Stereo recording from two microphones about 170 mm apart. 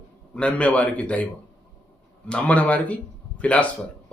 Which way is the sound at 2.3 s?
10° left (ahead or behind).